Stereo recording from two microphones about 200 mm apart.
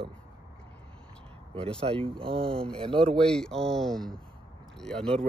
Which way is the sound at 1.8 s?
30° right (ahead or behind).